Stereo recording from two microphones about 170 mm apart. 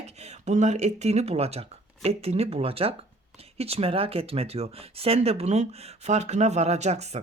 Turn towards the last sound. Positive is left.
turn(degrees=-40)  # may be behind; listen again after turning